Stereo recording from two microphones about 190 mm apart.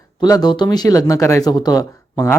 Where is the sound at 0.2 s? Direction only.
20° left (ahead or behind).